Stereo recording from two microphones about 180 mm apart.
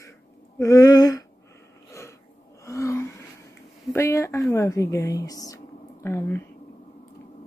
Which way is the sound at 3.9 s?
15° left (ahead or behind).